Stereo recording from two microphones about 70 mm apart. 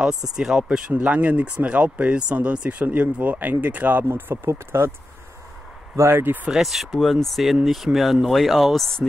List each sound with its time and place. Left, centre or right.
0.4 s speech: centre
4.1 s speech: right
5.9 s speech: right
6.5 s speech: centre